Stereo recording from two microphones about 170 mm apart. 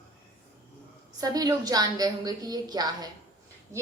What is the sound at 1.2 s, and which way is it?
A woman's voice, 20° right (ahead or behind).